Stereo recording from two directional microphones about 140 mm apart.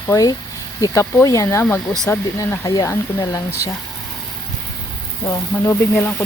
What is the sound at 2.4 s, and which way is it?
Speech, 25° left (ahead or behind).